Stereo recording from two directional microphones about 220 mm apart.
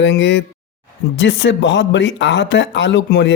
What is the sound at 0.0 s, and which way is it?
A man's voice, 55° left (ahead or behind).